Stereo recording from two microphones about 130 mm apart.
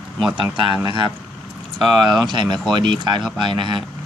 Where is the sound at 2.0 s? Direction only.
35° right (ahead or behind).